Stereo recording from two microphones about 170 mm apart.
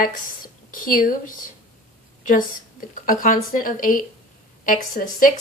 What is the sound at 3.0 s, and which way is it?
A woman's voice, 50° left (ahead or behind).